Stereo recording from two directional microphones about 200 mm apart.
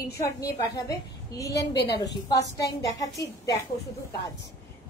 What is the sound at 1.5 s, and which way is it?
Speech, 60° left (ahead or behind).